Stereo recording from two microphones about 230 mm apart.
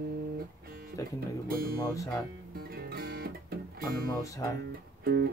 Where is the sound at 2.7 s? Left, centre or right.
Right.